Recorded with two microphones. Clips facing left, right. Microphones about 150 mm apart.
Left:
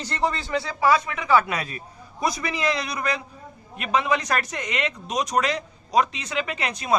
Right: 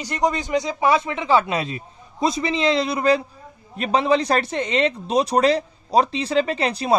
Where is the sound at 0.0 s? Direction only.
15° right (ahead or behind).